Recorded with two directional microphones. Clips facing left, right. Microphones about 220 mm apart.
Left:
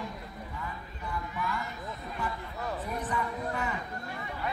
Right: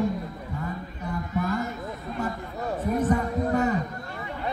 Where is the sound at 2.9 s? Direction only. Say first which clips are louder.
Right 13 dB; 45° right (ahead or behind).